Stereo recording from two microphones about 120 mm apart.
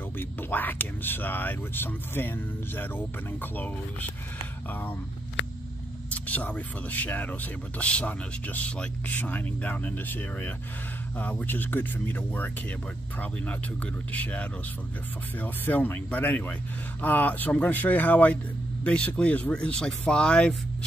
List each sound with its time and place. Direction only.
0.2 s speech: 15° left (ahead or behind)
6.1 s speech: 15° left (ahead or behind)
14.1 s speech: 10° left (ahead or behind)